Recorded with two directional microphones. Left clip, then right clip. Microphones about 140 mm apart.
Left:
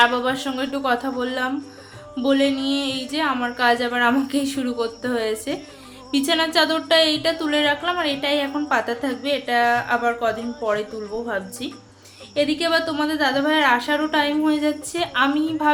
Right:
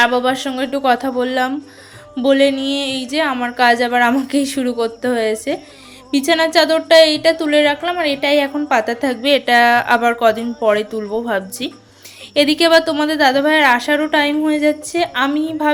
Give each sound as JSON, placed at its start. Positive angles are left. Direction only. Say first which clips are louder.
{"t": 0.0, "sound": "a woman's voice", "louder": "right 4 dB", "side_deg": -45}
{"t": 9.3, "sound": "a woman's voice", "louder": "right 8 dB", "side_deg": -90}
{"t": 10.6, "sound": "a woman's voice", "louder": "right 9 dB", "side_deg": -65}